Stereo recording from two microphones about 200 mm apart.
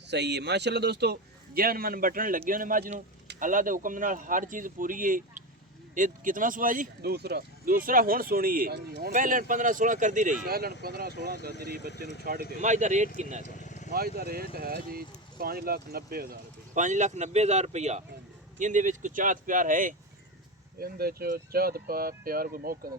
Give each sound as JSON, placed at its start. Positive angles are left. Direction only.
{"t": 0.1, "sound": "a man's voice", "side_deg": -60}
{"t": 12.2, "sound": "speech", "side_deg": -50}
{"t": 12.5, "sound": "speech", "side_deg": -35}
{"t": 13.4, "sound": "vehicle", "side_deg": 40}
{"t": 13.9, "sound": "speech", "side_deg": -50}